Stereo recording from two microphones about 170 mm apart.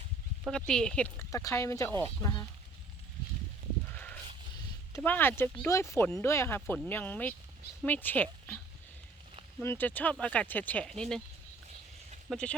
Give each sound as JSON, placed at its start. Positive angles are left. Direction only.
{"t": 0.7, "sound": "speech", "side_deg": 5}
{"t": 1.9, "sound": "speech", "side_deg": -25}
{"t": 2.2, "sound": "speech", "side_deg": 20}
{"t": 3.9, "sound": "a sound", "side_deg": 10}
{"t": 4.9, "sound": "speech", "side_deg": 10}
{"t": 9.6, "sound": "speech", "side_deg": 10}
{"t": 12.3, "sound": "speech", "side_deg": 5}